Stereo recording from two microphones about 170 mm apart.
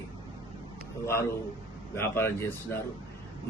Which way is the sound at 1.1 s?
15° left (ahead or behind).